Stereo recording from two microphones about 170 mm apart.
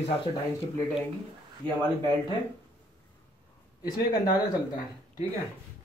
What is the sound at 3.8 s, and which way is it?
Speech, 25° left (ahead or behind).